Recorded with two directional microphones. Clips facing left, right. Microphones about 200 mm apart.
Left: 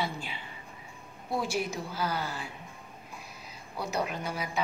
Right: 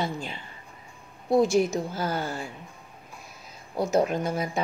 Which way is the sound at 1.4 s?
45° right (ahead or behind).